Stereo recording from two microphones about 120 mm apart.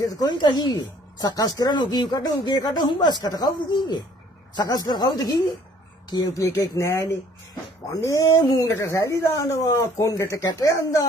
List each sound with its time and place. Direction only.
0.0 s a woman's voice: 35° left (ahead or behind)